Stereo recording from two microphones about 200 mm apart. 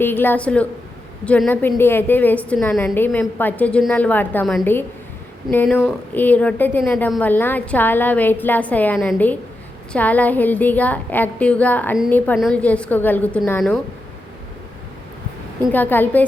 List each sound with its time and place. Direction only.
0.0 s a woman's voice: 10° left (ahead or behind)
15.7 s a woman's voice: 10° left (ahead or behind)